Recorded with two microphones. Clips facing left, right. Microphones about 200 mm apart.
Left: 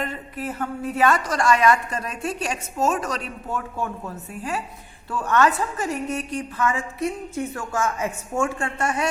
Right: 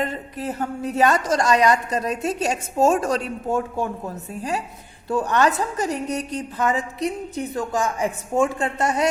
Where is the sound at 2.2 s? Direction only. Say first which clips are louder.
Right 4 dB; 20° right (ahead or behind); by 5.9 s 40° right (ahead or behind).